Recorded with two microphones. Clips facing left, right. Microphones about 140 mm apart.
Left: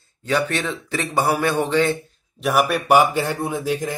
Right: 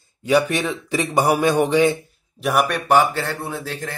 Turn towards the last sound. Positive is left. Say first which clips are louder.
# left 5 dB
turn(degrees=15)  # may be behind; listen again after turning